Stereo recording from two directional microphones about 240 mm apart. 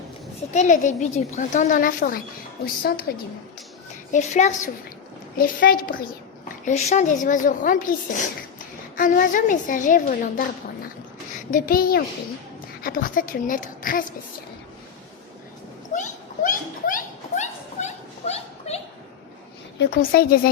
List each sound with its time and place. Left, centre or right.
0.5 s a woman's voice: left
4.1 s a woman's voice: left
11.5 s a woman's voice: left
16.0 s a sound: left
19.8 s a woman's voice: left